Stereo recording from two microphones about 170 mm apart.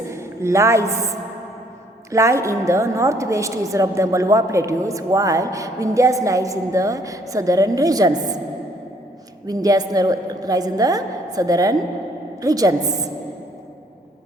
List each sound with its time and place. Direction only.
0.1 s a woman's voice: 15° right (ahead or behind)
9.5 s a woman's voice: 20° right (ahead or behind)